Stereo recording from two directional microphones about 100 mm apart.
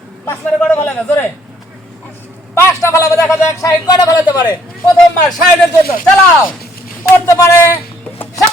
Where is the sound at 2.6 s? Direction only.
30° left (ahead or behind).